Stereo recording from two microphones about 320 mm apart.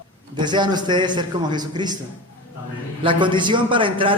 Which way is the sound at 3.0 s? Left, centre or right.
Centre.